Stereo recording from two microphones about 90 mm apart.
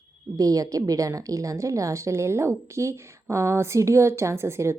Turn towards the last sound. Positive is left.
turn(degrees=-30)  # may be behind; listen again after turning